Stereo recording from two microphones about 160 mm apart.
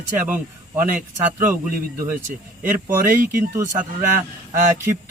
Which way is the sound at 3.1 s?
60° right (ahead or behind).